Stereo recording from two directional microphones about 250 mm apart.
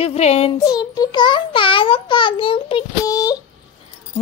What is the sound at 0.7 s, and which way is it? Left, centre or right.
A child's voice, centre.